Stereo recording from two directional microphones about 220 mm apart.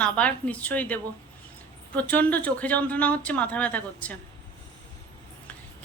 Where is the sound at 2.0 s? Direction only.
5° left (ahead or behind).